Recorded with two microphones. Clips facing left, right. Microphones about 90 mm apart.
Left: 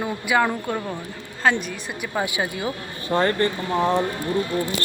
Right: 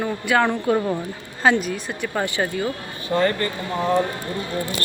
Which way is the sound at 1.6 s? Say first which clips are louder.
Right 4 dB; 5° left (ahead or behind).